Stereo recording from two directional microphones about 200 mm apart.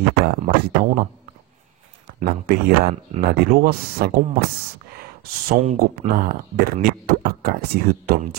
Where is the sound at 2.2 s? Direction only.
45° right (ahead or behind).